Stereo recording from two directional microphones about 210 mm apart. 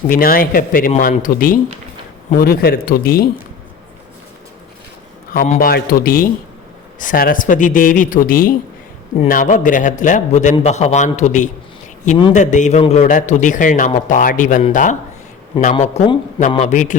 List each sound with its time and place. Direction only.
0.1 s a man's voice: 45° left (ahead or behind)
5.3 s a man's voice: 45° left (ahead or behind)